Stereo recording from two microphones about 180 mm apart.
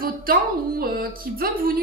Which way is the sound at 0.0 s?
55° right (ahead or behind).